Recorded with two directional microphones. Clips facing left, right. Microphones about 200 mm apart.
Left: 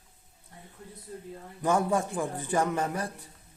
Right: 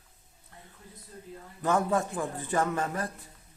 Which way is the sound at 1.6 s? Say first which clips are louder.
Left 1 dB; 15° left (ahead or behind).